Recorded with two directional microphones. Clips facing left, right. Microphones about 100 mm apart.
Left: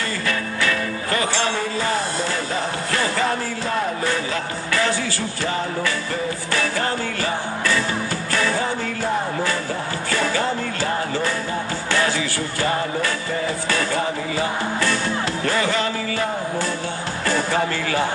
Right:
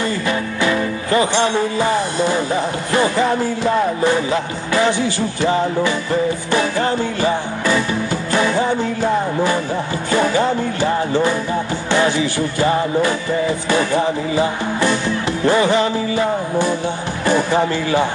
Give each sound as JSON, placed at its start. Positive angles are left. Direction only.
{"t": 0.3, "sound": "music", "side_deg": -20}
{"t": 10.1, "sound": "music", "side_deg": -20}